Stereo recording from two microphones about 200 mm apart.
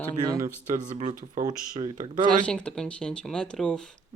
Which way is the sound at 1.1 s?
40° right (ahead or behind).